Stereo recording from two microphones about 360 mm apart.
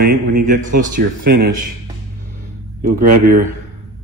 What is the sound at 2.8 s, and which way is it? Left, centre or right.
Speech, right.